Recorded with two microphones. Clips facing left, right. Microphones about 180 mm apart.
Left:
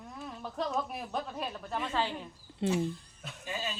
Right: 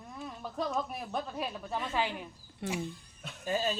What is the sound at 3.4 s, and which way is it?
Speech, 40° right (ahead or behind).